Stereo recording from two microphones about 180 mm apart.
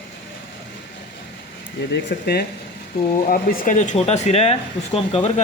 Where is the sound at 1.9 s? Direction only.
65° left (ahead or behind); by 5.3 s 35° left (ahead or behind).